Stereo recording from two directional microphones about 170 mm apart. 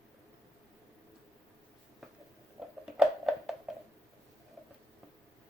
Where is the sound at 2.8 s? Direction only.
Centre (ahead or behind).